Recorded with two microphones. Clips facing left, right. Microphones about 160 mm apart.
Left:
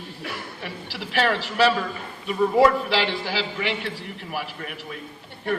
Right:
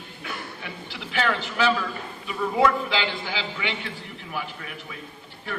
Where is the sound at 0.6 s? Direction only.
35° left (ahead or behind).